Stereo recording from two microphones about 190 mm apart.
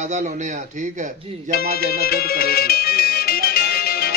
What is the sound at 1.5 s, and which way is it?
Music, 55° left (ahead or behind).